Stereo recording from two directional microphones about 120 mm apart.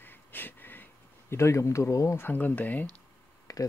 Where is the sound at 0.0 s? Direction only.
15° left (ahead or behind).